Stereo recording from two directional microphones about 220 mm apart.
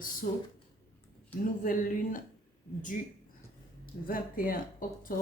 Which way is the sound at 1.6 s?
40° left (ahead or behind).